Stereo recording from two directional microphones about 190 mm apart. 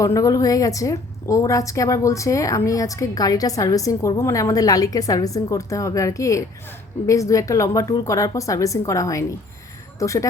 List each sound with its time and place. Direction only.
0.0 s a woman's voice: 15° left (ahead or behind)